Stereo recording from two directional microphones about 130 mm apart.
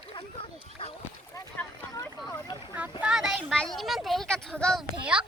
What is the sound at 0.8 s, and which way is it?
Speech, 45° left (ahead or behind).